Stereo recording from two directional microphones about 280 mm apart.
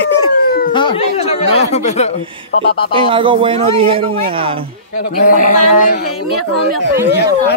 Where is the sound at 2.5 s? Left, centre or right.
Left.